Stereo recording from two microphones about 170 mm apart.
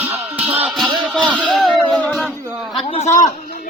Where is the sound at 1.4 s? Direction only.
5° left (ahead or behind).